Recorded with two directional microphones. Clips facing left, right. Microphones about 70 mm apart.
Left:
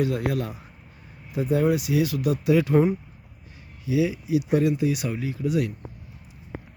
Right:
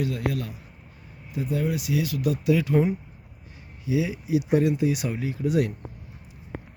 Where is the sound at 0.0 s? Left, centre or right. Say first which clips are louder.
Left 3 dB; centre.